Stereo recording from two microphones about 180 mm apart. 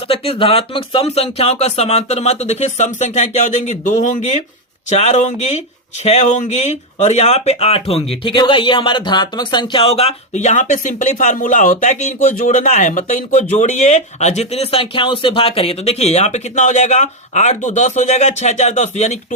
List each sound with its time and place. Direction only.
0.1 s speech: 30° left (ahead or behind)